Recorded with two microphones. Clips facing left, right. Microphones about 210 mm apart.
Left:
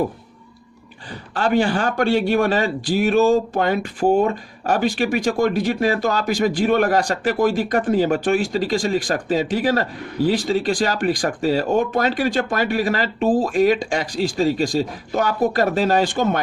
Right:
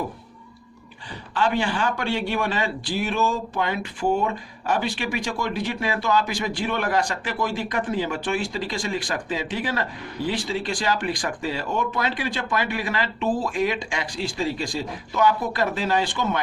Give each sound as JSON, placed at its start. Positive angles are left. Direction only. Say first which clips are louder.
{"t": 1.3, "sound": "speech", "louder": "left 5 dB", "side_deg": 40}